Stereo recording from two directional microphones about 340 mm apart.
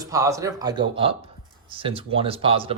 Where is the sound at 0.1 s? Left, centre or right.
Centre.